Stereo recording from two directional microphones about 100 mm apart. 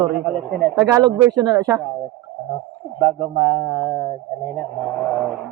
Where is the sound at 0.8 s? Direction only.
40° right (ahead or behind).